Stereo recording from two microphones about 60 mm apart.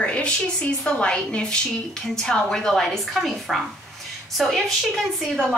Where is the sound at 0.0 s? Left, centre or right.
Centre.